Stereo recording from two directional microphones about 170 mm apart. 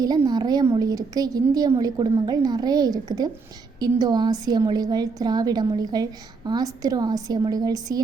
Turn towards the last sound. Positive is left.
turn(degrees=-20)  # may be behind; listen again after turning